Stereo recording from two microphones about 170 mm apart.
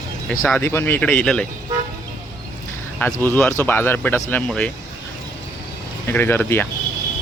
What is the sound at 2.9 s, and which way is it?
Speech, 10° left (ahead or behind).